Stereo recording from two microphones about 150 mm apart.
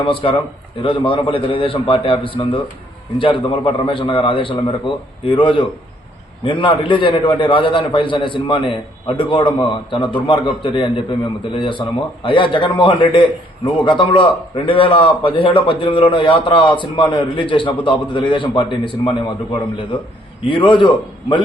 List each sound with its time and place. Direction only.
0.0 s a man's voice: 35° left (ahead or behind)